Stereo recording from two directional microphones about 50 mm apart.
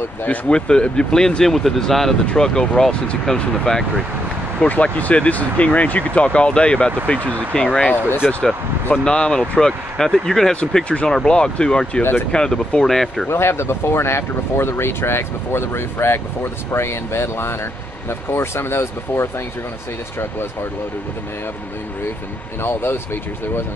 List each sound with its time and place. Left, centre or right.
0.3 s speech: centre
4.6 s speech: left
10.7 s speech: left
12.0 s speech: left
12.3 s speech: centre
13.3 s speech: left
22.6 s speech: left